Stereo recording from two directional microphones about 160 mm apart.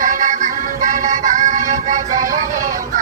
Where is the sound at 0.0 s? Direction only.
55° right (ahead or behind).